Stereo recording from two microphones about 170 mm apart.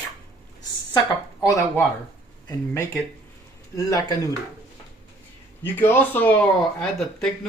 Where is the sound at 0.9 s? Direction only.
20° left (ahead or behind).